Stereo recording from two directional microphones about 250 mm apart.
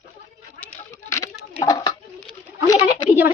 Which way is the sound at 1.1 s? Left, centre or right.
Centre.